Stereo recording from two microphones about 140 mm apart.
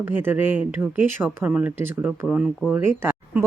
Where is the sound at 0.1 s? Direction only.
15° right (ahead or behind).